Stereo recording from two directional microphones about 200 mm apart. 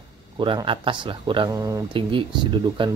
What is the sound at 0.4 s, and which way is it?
Speech, 25° right (ahead or behind).